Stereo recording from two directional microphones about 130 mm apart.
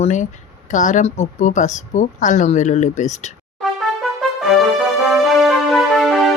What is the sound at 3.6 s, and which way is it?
Music, centre (ahead or behind).